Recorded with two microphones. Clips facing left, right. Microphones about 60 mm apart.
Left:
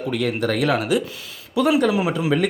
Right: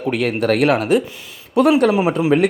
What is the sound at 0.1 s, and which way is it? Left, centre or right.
Speech, right.